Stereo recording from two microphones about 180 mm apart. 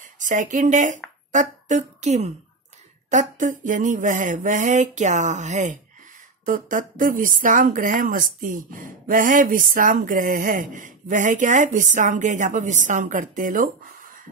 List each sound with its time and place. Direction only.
0.2 s a woman's voice: 45° right (ahead or behind)